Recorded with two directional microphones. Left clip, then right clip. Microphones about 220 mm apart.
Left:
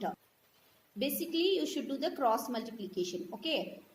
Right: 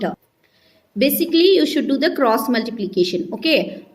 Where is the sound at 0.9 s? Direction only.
35° right (ahead or behind).